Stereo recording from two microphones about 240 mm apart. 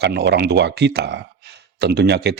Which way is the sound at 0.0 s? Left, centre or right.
Right.